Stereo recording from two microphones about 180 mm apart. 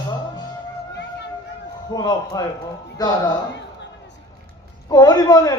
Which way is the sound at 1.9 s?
20° left (ahead or behind).